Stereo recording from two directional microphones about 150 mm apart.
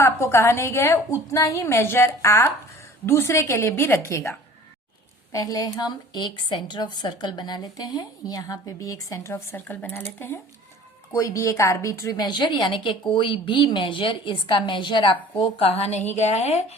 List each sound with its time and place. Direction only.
0.0 s a woman's voice: 15° left (ahead or behind)
5.3 s a woman's voice: 25° left (ahead or behind); by 16.7 s 45° left (ahead or behind)